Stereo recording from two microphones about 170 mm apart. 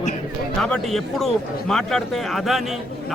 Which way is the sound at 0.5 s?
5° left (ahead or behind).